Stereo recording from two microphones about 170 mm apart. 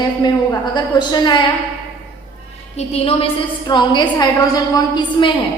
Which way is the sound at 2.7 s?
35° left (ahead or behind).